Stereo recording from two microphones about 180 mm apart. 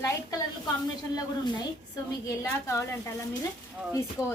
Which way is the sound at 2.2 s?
15° left (ahead or behind).